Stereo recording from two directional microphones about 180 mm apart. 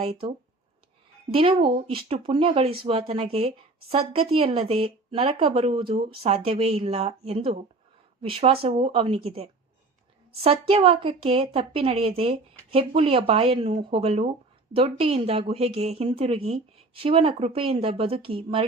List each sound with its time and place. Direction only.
0.0 s a woman's voice: 30° right (ahead or behind)